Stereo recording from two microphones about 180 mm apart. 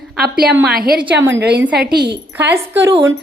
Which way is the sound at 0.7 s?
Centre (ahead or behind).